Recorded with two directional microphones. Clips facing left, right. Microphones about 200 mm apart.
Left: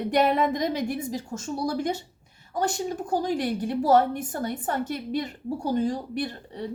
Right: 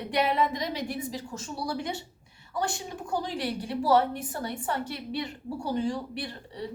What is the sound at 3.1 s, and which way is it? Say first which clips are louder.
A woman's voice: left 4 dB; 45° left (ahead or behind).